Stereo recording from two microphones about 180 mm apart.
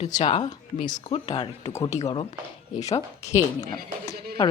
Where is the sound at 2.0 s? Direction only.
35° left (ahead or behind).